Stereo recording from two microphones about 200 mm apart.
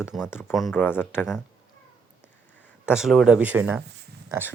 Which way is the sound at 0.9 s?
10° left (ahead or behind).